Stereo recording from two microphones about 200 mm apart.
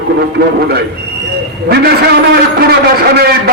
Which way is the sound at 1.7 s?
55° right (ahead or behind).